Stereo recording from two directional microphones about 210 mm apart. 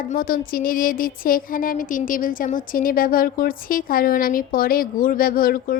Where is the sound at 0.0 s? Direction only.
40° left (ahead or behind).